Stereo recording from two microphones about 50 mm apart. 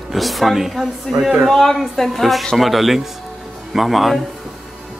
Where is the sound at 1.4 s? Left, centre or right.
Centre.